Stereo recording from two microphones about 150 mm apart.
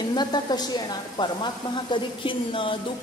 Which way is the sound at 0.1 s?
30° left (ahead or behind).